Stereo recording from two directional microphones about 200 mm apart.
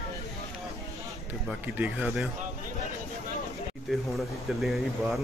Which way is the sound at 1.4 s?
10° right (ahead or behind).